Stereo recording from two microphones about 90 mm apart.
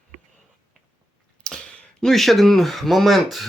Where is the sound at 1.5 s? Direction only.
10° left (ahead or behind).